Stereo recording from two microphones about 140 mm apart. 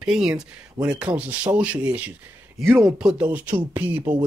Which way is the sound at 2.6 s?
5° left (ahead or behind).